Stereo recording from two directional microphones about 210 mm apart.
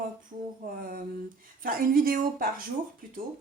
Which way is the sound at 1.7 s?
45° right (ahead or behind).